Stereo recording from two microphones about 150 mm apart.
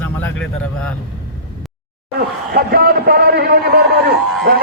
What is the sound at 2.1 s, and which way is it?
A man's voice, 90° right.